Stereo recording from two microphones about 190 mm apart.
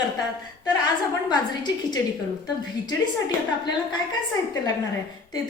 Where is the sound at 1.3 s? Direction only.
20° left (ahead or behind).